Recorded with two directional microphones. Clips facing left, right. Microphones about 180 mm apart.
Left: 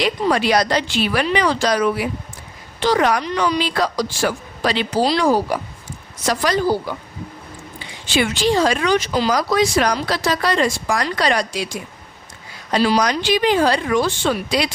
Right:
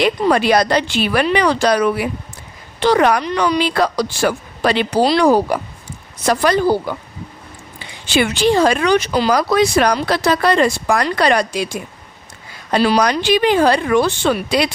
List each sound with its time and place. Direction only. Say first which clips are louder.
0.0 s speech: right 4 dB; 55° right (ahead or behind)
8.1 s speech: right 3 dB; 65° right (ahead or behind)